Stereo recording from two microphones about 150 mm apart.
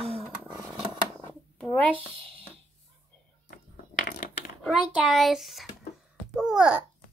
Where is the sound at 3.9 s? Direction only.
70° left (ahead or behind).